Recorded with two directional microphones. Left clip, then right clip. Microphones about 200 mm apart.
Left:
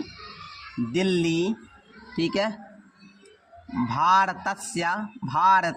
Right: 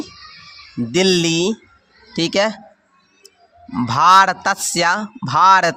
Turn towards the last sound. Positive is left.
turn(degrees=-40)  # may be behind; listen again after turning